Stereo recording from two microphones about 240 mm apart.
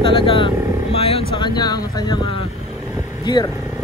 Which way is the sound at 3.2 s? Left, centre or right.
Centre.